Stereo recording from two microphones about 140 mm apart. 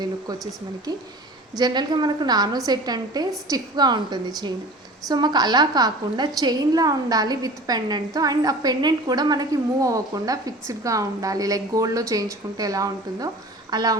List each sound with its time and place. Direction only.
0.9 s a woman's voice: 30° right (ahead or behind)